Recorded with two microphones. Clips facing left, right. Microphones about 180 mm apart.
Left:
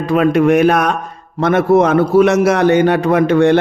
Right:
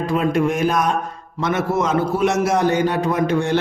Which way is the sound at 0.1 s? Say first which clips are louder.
Left 9 dB; 70° left (ahead or behind).